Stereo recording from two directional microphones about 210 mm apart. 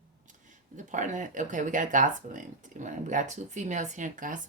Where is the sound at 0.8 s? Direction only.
35° right (ahead or behind).